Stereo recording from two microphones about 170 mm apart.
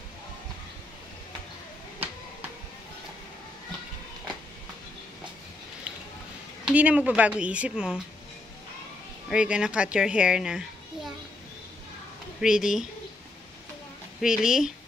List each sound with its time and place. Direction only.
6.6 s a woman's voice: 10° right (ahead or behind)
9.3 s a child's voice: 5° right (ahead or behind)
12.4 s speech: 5° right (ahead or behind)
14.2 s speech: 5° right (ahead or behind)